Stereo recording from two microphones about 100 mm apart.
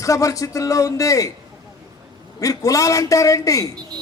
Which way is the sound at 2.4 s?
35° left (ahead or behind).